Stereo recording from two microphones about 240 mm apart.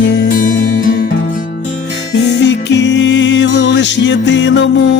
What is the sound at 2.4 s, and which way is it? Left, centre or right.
Music, left.